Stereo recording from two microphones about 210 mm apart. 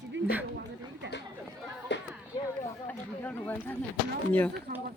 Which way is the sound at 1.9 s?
55° left (ahead or behind).